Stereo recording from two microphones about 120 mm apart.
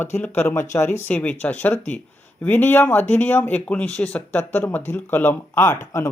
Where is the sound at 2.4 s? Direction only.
15° left (ahead or behind).